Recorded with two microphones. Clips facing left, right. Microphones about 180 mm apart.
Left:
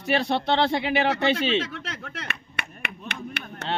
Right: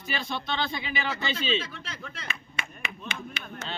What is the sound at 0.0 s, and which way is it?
Speech, 70° left (ahead or behind).